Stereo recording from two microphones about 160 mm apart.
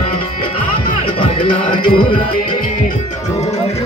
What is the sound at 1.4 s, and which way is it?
Music, 60° left (ahead or behind).